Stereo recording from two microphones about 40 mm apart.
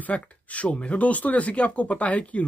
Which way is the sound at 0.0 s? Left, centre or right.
Left.